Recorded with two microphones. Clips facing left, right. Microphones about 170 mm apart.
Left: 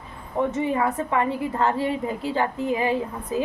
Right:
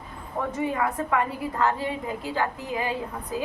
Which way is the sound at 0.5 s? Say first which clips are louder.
Left 3 dB; 25° left (ahead or behind).